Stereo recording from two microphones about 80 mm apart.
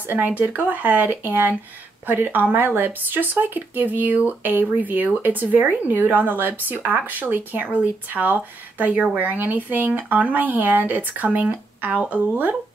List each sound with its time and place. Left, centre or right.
0.1 s speech: right